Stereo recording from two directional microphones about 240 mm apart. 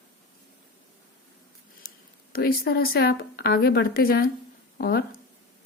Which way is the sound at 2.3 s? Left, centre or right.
Left.